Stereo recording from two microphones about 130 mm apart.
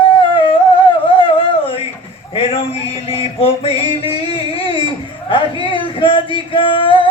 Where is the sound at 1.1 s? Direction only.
45° left (ahead or behind).